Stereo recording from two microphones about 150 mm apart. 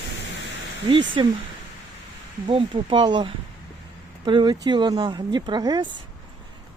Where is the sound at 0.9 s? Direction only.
35° right (ahead or behind).